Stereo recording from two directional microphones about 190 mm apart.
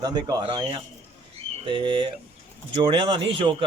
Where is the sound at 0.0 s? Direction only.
20° right (ahead or behind).